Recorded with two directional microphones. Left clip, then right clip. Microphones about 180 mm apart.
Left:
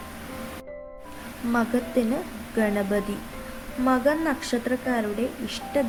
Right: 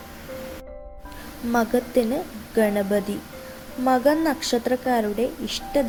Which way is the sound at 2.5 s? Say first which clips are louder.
Right 4 dB; 10° right (ahead or behind).